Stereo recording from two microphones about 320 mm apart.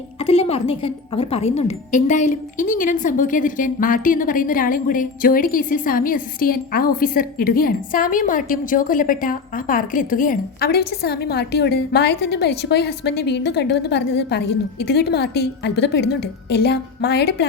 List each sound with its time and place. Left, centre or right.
0.2 s a woman's voice: centre